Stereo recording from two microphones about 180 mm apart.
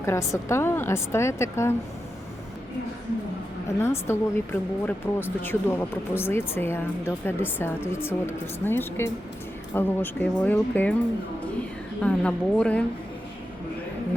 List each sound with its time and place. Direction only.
0.0 s speech: 15° left (ahead or behind)
3.8 s speech: 15° left (ahead or behind)
12.0 s speech: 5° left (ahead or behind)